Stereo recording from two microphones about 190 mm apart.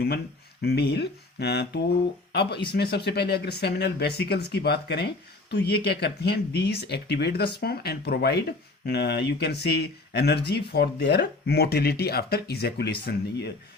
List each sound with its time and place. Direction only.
0.6 s speech: 55° left (ahead or behind)